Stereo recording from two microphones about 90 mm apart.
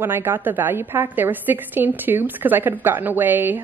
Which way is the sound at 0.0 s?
25° right (ahead or behind).